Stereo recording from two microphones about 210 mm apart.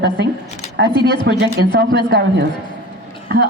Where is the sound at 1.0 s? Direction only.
20° left (ahead or behind).